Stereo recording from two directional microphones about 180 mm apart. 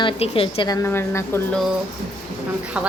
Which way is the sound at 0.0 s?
30° left (ahead or behind).